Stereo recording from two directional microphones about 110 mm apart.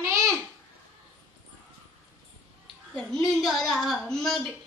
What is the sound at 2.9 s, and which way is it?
A woman's voice, 5° left (ahead or behind).